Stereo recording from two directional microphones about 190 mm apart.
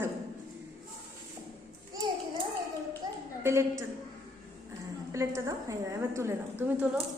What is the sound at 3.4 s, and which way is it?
Speech, 15° right (ahead or behind).